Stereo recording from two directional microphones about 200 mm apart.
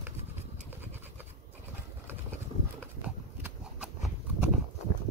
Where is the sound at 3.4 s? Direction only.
5° right (ahead or behind).